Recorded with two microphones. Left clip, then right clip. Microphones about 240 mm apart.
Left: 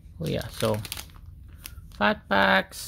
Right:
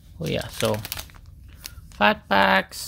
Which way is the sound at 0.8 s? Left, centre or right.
Centre.